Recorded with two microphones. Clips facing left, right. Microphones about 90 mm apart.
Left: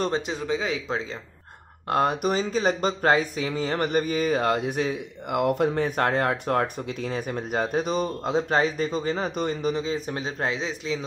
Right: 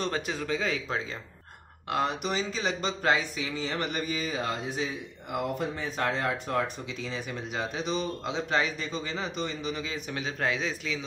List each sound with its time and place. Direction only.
0.1 s speech: 20° left (ahead or behind)
1.9 s speech: 45° left (ahead or behind)
9.8 s a man's voice: 35° left (ahead or behind)